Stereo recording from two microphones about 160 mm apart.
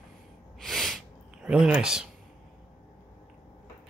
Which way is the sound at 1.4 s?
5° right (ahead or behind).